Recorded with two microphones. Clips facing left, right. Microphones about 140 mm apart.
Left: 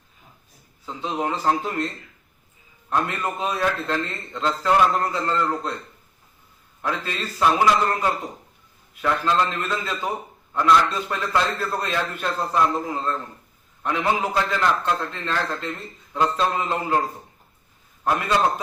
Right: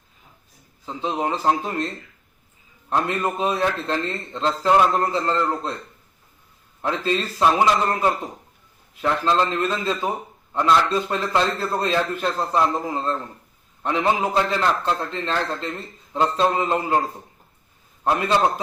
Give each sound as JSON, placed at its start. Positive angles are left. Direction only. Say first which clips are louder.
{"t": 0.9, "sound": "a man's voice", "louder": "right 2 dB", "side_deg": -25}
{"t": 2.9, "sound": "a man's voice", "louder": "right 2 dB", "side_deg": -25}
{"t": 6.8, "sound": "a man's voice", "louder": "right 5 dB", "side_deg": -25}
{"t": 18.0, "sound": "a man's voice", "louder": "right 2 dB", "side_deg": -25}